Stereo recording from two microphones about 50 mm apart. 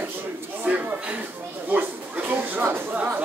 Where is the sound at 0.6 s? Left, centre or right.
Right.